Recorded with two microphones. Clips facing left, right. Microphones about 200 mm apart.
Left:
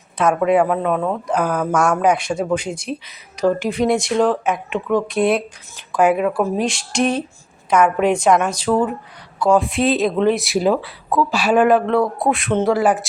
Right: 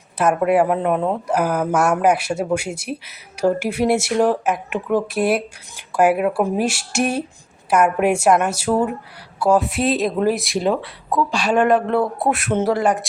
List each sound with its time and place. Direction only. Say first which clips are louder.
0.2 s speech: left 1 dB; 5° right (ahead or behind)